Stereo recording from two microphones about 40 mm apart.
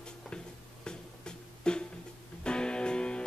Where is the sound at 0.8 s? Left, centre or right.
Left.